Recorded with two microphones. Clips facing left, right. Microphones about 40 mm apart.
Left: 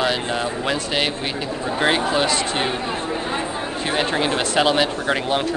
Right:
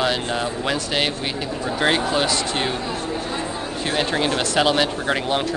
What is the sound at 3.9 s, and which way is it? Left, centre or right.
Speech, centre.